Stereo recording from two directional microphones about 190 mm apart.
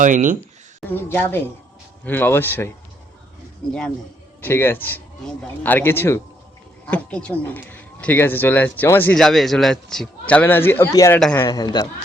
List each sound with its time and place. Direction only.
0.0 s speech: 45° right (ahead or behind)
0.9 s a man's voice: 10° left (ahead or behind)